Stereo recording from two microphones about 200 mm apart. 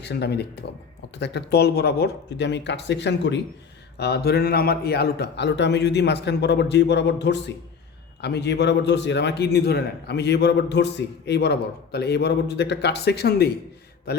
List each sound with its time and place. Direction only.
0.0 s a man's voice: 55° left (ahead or behind)